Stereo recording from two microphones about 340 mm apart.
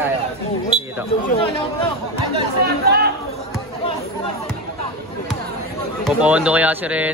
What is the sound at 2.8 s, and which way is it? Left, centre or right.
Speech, right.